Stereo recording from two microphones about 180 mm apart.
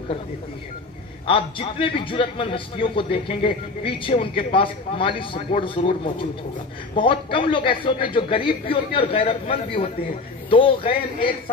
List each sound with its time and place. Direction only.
1.2 s a man's voice: 30° left (ahead or behind)